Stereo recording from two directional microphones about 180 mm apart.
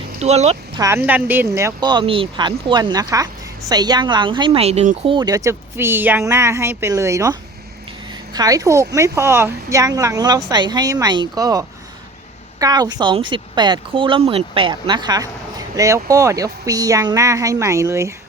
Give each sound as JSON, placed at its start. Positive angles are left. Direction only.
{"t": 0.2, "sound": "speech", "side_deg": -35}
{"t": 0.8, "sound": "a woman's voice", "side_deg": -15}